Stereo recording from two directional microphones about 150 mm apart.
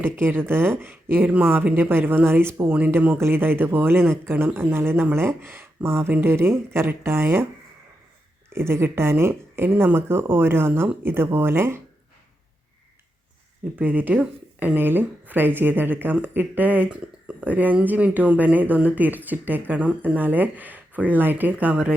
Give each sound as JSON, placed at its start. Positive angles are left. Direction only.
{"t": 0.0, "sound": "speech", "side_deg": -15}
{"t": 8.4, "sound": "speech", "side_deg": -15}
{"t": 13.7, "sound": "speech", "side_deg": -10}